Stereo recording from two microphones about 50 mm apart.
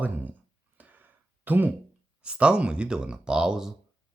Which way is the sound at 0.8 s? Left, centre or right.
Right.